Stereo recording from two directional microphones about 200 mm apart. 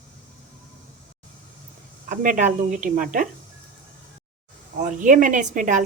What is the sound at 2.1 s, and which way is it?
A woman's voice, 40° right (ahead or behind).